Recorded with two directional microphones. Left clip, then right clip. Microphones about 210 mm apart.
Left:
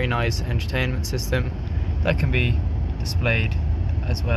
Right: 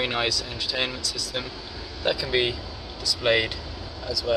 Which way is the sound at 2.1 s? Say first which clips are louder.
Right 3 dB; 5° right (ahead or behind).